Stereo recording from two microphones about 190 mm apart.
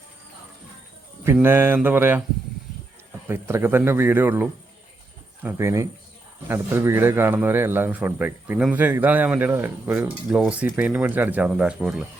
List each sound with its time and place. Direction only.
1.2 s a man's voice: 10° right (ahead or behind)
3.2 s a man's voice: 15° right (ahead or behind)